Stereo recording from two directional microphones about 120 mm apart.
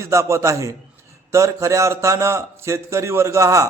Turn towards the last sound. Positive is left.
turn(degrees=-25)  # may be behind; listen again after turning